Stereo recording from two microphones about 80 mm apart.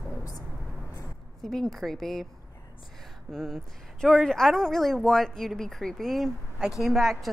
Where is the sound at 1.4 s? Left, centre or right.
Centre.